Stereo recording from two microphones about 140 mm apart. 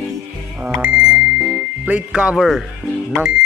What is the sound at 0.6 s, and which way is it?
Bicycle bell, 10° right (ahead or behind).